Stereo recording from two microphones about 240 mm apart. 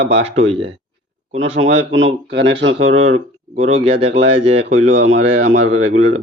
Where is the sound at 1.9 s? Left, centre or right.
Right.